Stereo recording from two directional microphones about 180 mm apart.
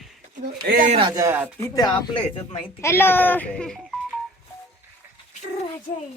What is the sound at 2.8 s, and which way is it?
A child's voice, 15° left (ahead or behind).